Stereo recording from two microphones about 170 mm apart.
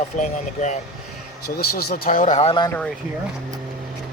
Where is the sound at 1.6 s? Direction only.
65° left (ahead or behind); by 2.5 s 40° left (ahead or behind).